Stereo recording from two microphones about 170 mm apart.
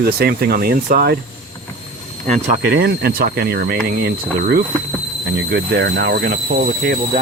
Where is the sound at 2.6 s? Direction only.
70° right (ahead or behind); by 7.2 s 55° right (ahead or behind).